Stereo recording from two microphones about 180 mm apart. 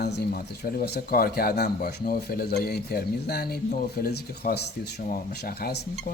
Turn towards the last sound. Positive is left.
turn(degrees=65)  # may be behind; listen again after turning